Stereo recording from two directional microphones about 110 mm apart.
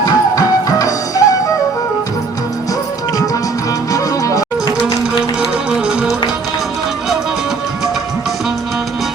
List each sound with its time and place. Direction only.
0.0 s music: 30° left (ahead or behind)
3.9 s music: 30° left (ahead or behind)